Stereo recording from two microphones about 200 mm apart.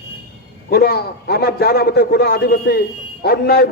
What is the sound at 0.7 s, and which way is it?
A man's voice, 50° left (ahead or behind).